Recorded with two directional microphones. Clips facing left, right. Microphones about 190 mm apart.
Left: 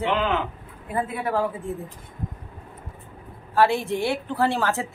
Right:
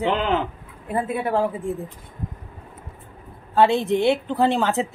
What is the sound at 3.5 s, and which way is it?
A woman's voice, 20° right (ahead or behind).